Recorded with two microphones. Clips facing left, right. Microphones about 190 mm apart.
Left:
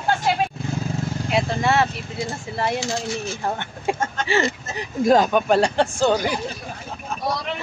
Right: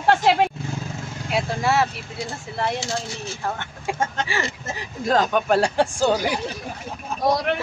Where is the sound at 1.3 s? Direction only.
5° right (ahead or behind).